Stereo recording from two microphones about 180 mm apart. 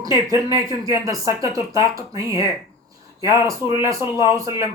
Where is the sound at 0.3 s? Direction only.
15° right (ahead or behind).